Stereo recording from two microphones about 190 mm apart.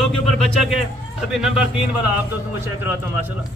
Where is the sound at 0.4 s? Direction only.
5° left (ahead or behind).